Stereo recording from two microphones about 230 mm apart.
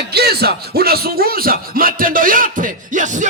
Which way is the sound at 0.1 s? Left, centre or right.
Right.